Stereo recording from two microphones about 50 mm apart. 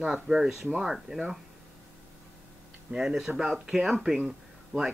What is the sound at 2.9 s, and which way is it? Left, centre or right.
Speech, centre.